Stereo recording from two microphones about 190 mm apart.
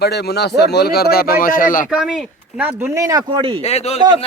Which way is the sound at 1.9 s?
Centre (ahead or behind).